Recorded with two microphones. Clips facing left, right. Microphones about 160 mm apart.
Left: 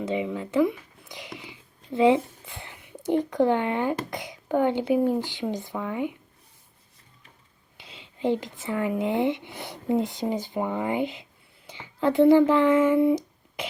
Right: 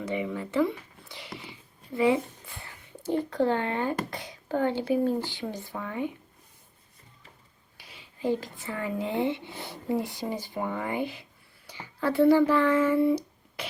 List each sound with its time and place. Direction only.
0.0 s speech: 20° left (ahead or behind)
7.8 s speech: 20° left (ahead or behind)